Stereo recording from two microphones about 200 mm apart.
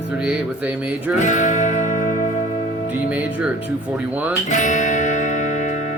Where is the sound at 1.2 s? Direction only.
40° left (ahead or behind).